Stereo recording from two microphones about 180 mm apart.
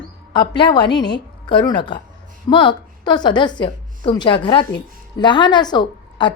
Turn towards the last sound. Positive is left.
turn(degrees=25)  # may be behind; listen again after turning